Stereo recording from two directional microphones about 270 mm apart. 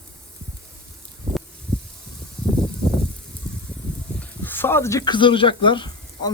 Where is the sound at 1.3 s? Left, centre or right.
Right.